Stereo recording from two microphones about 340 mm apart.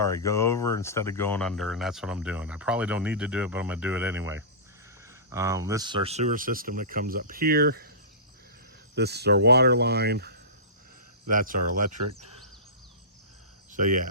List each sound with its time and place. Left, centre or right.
0.0 s speech: centre; by 7.9 s right
9.0 s speech: right
13.7 s speech: right